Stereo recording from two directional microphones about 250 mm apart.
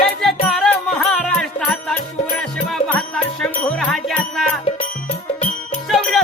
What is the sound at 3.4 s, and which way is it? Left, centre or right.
Music, centre.